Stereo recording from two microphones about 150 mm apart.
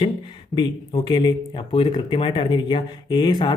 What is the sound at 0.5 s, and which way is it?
Speech, 30° left (ahead or behind).